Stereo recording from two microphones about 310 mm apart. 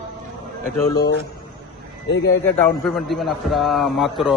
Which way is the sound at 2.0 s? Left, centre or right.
Left.